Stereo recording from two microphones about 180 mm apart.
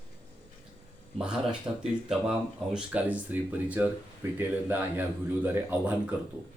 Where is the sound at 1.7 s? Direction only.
20° right (ahead or behind).